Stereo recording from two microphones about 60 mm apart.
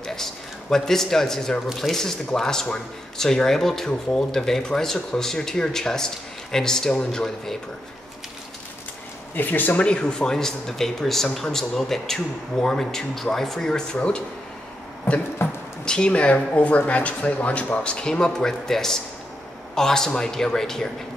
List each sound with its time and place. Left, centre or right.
0.0 s a man's voice: centre
9.3 s speech: left
9.8 s speech: centre
15.4 s a sound: centre
16.1 s speech: left; by 20.9 s centre